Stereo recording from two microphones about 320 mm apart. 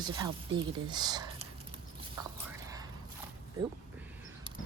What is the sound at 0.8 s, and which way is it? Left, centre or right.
Speech, centre.